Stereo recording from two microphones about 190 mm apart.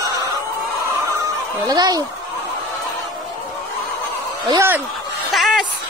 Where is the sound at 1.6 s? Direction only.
20° right (ahead or behind).